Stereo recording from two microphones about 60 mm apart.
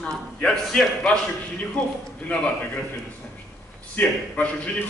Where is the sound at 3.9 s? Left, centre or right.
Left.